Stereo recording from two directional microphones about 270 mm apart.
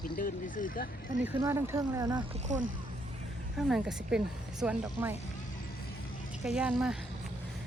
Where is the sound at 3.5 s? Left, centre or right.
Centre.